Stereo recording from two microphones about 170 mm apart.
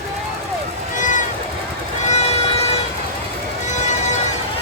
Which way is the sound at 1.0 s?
50° left (ahead or behind).